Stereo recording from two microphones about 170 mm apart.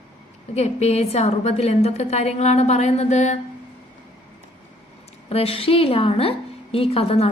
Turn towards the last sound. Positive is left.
turn(degrees=35)  # may be behind; listen again after turning